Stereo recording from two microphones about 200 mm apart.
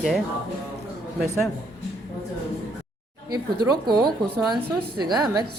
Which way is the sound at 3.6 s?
20° right (ahead or behind).